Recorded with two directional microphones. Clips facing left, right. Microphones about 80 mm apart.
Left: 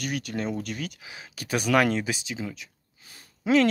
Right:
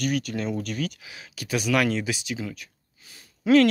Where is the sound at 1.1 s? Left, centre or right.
Left.